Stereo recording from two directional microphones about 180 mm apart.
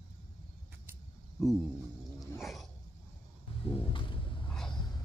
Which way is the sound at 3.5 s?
30° left (ahead or behind).